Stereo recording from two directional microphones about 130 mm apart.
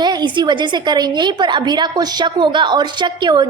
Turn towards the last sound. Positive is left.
turn(degrees=-35)  # may be behind; listen again after turning